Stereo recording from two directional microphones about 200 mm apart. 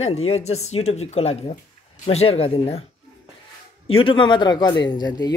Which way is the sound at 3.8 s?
25° left (ahead or behind).